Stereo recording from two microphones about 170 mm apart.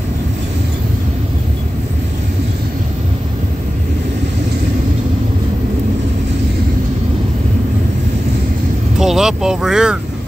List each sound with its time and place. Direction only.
9.0 s speech: 5° right (ahead or behind)